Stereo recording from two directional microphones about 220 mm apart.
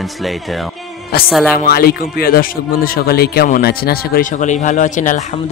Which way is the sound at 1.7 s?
45° left (ahead or behind).